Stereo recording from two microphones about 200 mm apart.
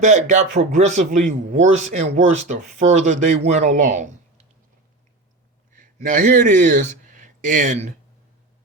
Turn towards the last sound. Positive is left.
turn(degrees=-40)  # may be behind; listen again after turning